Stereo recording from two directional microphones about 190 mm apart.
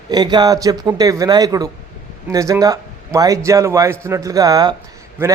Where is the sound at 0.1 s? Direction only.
20° right (ahead or behind).